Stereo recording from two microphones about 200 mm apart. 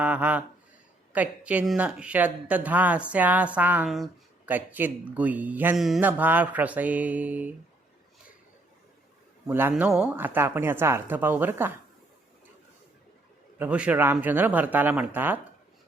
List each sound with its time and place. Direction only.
0.0 s speech: 5° right (ahead or behind)
9.5 s speech: 10° right (ahead or behind)
13.6 s speech: 5° right (ahead or behind)